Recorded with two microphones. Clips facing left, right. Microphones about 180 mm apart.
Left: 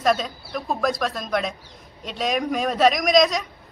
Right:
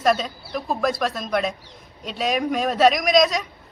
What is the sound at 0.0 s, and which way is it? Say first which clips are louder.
A man's voice: right 1 dB; centre (ahead or behind).